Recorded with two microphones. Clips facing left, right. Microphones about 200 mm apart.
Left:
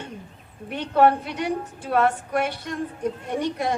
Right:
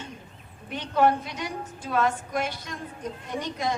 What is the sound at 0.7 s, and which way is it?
A woman's voice, 65° left (ahead or behind).